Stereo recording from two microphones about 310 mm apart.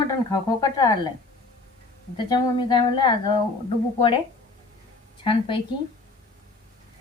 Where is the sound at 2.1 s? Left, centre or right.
Centre.